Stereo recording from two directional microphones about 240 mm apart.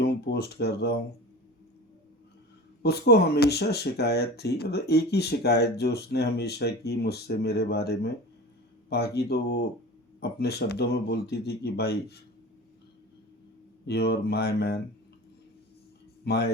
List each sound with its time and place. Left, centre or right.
0.0 s speech: left
2.8 s speech: left
13.8 s speech: left
16.2 s speech: left